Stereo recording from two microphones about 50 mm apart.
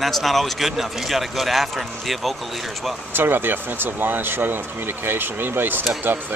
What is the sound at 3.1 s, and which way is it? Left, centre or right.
Speech, right.